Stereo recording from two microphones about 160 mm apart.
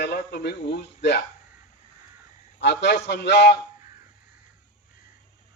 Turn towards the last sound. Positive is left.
turn(degrees=90)